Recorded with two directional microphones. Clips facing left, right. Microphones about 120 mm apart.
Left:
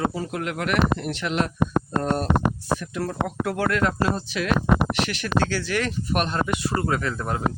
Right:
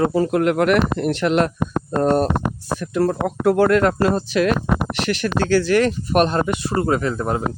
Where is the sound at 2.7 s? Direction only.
45° right (ahead or behind).